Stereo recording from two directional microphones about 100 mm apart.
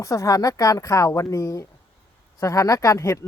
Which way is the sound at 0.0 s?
30° left (ahead or behind).